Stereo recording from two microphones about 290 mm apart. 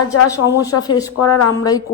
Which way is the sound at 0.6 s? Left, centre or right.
Centre.